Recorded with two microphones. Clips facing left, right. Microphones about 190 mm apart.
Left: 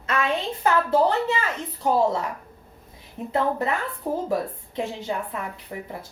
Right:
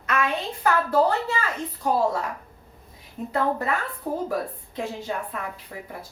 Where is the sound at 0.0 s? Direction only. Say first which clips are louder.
Left 1 dB; 25° left (ahead or behind).